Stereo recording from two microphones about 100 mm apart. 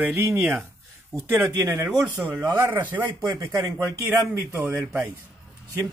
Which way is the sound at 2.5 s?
25° right (ahead or behind).